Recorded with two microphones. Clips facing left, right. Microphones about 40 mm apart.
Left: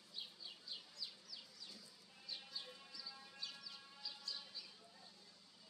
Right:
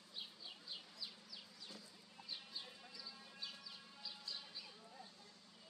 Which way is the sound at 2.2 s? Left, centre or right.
Centre.